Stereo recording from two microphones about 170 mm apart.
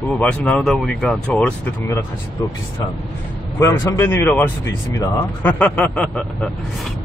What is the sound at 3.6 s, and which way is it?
Speech, 15° left (ahead or behind).